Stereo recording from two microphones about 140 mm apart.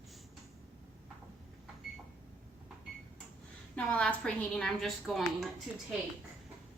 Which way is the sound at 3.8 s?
10° left (ahead or behind).